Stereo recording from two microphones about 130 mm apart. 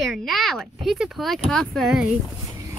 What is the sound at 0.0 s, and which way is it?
Speech, centre (ahead or behind).